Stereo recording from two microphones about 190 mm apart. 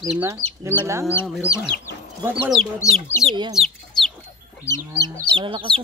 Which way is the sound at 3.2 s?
25° right (ahead or behind).